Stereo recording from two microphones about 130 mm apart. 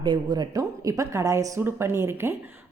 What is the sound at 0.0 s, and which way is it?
Speech, 35° right (ahead or behind).